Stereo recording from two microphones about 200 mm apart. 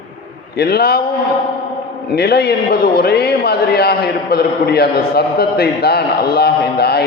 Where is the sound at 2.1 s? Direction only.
50° left (ahead or behind).